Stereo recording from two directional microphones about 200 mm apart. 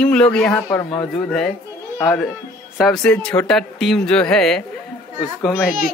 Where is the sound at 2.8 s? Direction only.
5° left (ahead or behind).